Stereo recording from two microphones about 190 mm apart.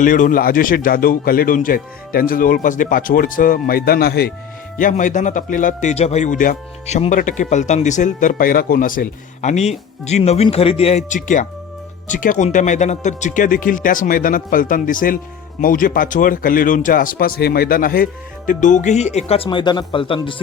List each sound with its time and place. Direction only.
0.0 s speech: 45° left (ahead or behind)
4.8 s a man's voice: 45° left (ahead or behind); by 20.3 s 25° left (ahead or behind)